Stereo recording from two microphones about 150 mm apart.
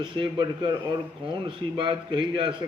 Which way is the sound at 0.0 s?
30° right (ahead or behind).